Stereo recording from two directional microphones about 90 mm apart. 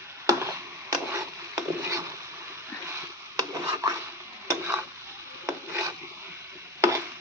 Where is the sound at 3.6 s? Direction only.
35° right (ahead or behind).